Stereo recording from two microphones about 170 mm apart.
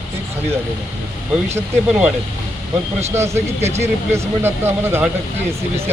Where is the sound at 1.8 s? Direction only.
5° right (ahead or behind).